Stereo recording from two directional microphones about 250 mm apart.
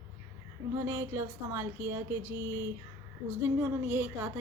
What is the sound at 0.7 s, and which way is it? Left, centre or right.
A woman's voice, centre.